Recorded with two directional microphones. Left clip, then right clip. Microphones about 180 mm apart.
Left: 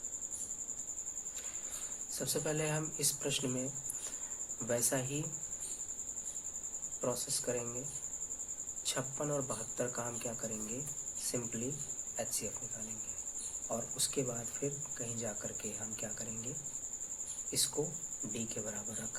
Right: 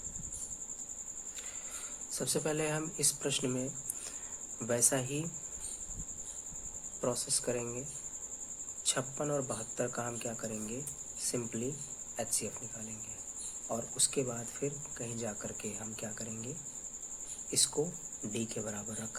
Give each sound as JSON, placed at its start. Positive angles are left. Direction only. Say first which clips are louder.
{"t": 2.1, "sound": "speech", "louder": "right 3 dB", "side_deg": -35}
{"t": 7.0, "sound": "speech", "louder": "right 3 dB", "side_deg": -30}
{"t": 8.9, "sound": "speech", "louder": "right 3 dB", "side_deg": -25}
{"t": 13.7, "sound": "speech", "louder": "right 3 dB", "side_deg": -25}
{"t": 17.5, "sound": "speech", "louder": "right 4 dB", "side_deg": -30}